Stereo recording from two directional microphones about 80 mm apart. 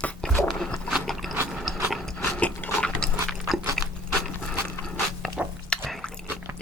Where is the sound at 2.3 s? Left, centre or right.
Centre.